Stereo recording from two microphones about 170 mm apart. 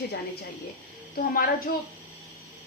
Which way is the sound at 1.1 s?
55° left (ahead or behind).